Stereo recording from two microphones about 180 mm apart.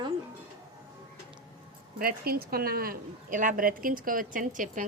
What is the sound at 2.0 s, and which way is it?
A woman's voice, 55° right (ahead or behind).